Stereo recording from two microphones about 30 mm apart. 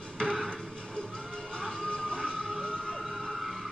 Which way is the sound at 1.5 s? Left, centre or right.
Left.